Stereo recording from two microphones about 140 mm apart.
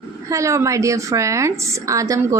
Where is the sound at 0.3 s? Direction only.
20° right (ahead or behind).